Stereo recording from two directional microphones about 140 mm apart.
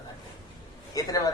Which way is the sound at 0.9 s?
25° left (ahead or behind).